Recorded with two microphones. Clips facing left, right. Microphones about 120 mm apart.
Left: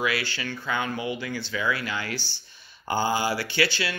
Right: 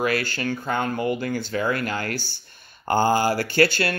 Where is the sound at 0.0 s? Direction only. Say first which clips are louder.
Right 4 dB; 45° right (ahead or behind).